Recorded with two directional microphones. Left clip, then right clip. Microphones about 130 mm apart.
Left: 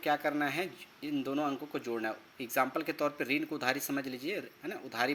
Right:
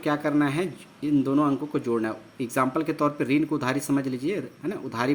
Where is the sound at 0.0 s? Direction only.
20° left (ahead or behind).